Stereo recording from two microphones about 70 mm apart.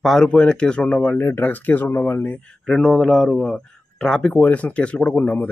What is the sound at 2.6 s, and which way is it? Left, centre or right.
Speech, centre.